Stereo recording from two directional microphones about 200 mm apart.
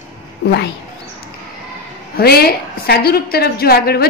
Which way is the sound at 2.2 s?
50° left (ahead or behind).